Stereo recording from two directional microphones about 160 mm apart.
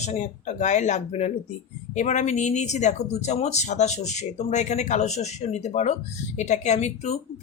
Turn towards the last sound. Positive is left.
turn(degrees=45)  # may be behind; listen again after turning